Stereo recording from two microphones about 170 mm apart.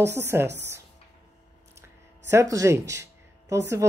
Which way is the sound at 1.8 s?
15° right (ahead or behind).